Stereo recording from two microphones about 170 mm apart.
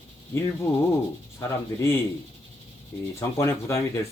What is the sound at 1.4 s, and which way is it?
Speech, 15° left (ahead or behind).